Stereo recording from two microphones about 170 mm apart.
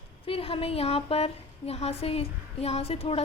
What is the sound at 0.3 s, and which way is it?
A woman's voice, 35° left (ahead or behind).